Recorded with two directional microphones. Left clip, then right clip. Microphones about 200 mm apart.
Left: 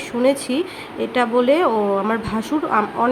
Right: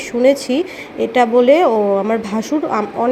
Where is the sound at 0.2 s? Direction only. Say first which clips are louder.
Right 5 dB; 10° right (ahead or behind).